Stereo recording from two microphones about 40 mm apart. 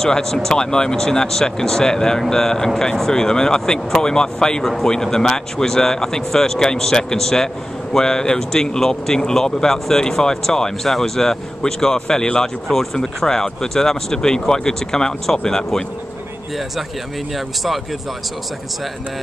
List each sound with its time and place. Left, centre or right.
0.0 s speech: centre